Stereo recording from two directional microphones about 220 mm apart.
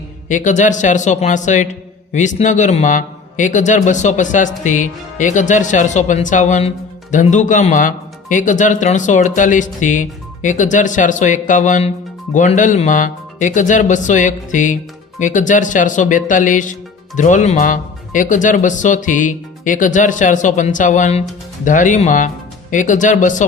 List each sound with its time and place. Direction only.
0.3 s a man's voice: 35° left (ahead or behind)